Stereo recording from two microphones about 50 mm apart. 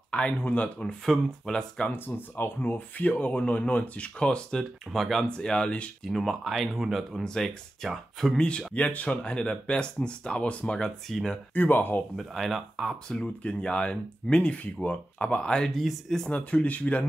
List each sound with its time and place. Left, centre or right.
0.1 s speech: left
1.0 s speech: centre
1.9 s speech: left; by 4.6 s centre
4.9 s speech: centre
5.3 s speech: centre
6.0 s speech: centre
7.2 s speech: centre
8.4 s speech: left
10.8 s speech: centre
11.5 s speech: left
12.2 s speech: centre
13.2 s speech: left; by 16.2 s centre
16.3 s speech: left